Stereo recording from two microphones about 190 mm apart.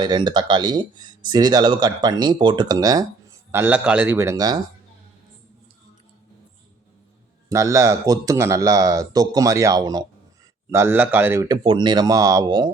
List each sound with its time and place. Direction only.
0.0 s speech: 25° right (ahead or behind)
7.5 s speech: 15° right (ahead or behind)
11.4 s speech: 25° right (ahead or behind)